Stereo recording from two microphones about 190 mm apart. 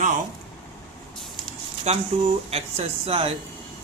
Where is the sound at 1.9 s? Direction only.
35° right (ahead or behind).